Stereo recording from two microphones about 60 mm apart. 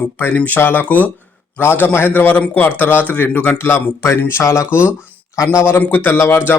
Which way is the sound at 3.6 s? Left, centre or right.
Left.